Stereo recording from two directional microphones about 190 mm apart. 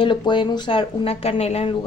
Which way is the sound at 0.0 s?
25° left (ahead or behind).